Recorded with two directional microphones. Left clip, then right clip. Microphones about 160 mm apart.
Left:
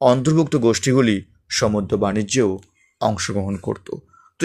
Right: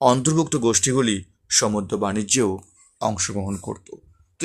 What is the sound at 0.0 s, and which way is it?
Speech, centre (ahead or behind).